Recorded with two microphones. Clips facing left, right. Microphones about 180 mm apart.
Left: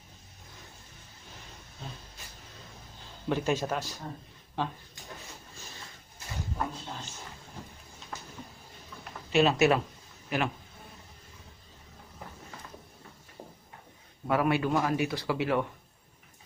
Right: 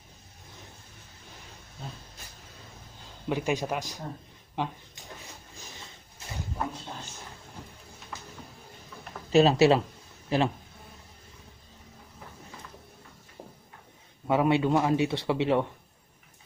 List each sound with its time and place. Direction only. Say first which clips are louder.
3.2 s speech: even; 10° right (ahead or behind)
9.3 s speech: right 4 dB; 35° right (ahead or behind)
14.3 s a man's voice: right 3 dB; 20° right (ahead or behind)